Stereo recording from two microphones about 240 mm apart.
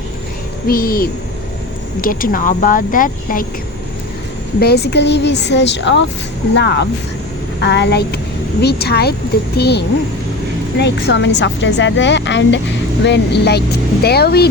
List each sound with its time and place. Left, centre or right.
0.7 s speech: left
4.6 s speech: left